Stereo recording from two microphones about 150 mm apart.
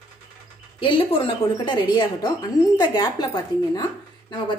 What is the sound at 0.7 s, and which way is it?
A woman's voice, 35° left (ahead or behind).